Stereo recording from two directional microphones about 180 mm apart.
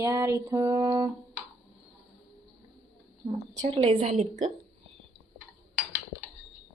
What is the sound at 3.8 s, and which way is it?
Speech, 40° right (ahead or behind).